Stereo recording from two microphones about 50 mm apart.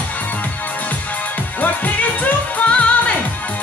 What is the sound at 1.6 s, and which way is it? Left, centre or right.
Music, left.